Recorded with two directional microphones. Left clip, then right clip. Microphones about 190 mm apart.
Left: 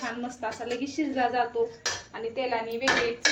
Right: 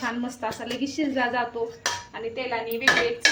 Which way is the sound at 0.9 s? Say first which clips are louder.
Right 1 dB; 55° right (ahead or behind).